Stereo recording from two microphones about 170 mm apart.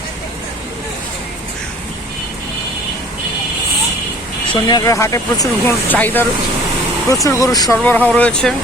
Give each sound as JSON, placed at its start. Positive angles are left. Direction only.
{"t": 4.5, "sound": "speech", "side_deg": 20}
{"t": 7.9, "sound": "speech", "side_deg": 10}